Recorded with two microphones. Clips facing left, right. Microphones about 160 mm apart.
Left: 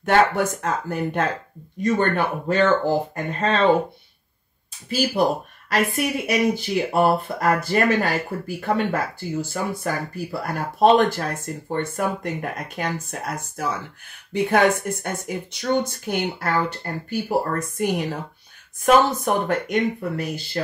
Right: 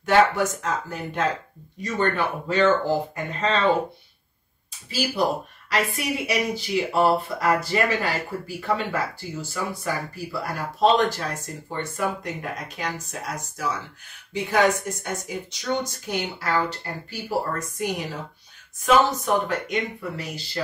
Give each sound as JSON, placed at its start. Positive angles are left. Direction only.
{"t": 0.0, "sound": "speech", "side_deg": 55}
{"t": 5.7, "sound": "speech", "side_deg": 50}